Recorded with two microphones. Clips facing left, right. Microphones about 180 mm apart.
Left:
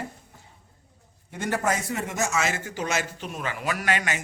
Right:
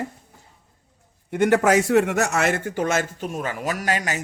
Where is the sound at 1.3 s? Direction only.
70° right (ahead or behind).